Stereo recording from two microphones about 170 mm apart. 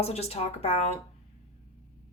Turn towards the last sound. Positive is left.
turn(degrees=35)  # may be behind; listen again after turning